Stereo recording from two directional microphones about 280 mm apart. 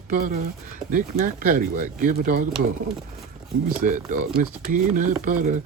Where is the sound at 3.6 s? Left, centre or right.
Right.